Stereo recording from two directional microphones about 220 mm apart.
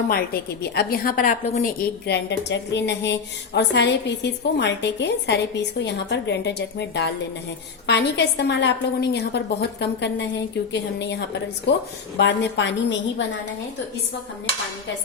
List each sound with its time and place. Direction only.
0.6 s a woman's voice: 45° left (ahead or behind)